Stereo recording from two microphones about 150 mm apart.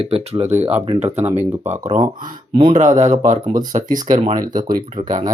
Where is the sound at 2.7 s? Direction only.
55° right (ahead or behind).